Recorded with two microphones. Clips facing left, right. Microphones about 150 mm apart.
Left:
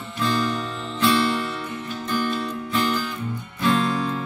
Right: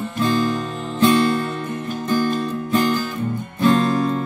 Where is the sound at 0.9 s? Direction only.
45° right (ahead or behind).